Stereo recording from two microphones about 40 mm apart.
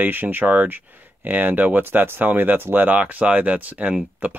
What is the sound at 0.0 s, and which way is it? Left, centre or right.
Speech, right.